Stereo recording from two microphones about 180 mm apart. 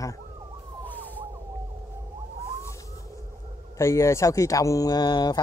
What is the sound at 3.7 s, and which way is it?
A man's voice, 15° left (ahead or behind).